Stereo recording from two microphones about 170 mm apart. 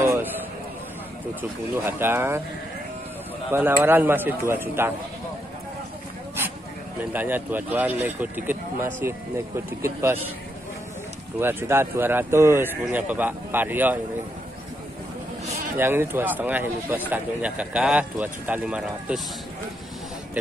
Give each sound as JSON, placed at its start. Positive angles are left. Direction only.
{"t": 0.0, "sound": "a sound", "side_deg": -15}
{"t": 1.9, "sound": "a man's voice", "side_deg": -10}
{"t": 3.5, "sound": "a man's voice", "side_deg": -10}
{"t": 7.1, "sound": "a man's voice", "side_deg": -10}
{"t": 11.3, "sound": "a man's voice", "side_deg": -15}
{"t": 15.8, "sound": "a man's voice", "side_deg": -10}